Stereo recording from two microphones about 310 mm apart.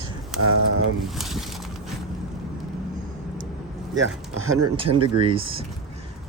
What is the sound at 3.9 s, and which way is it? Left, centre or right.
Speech, right.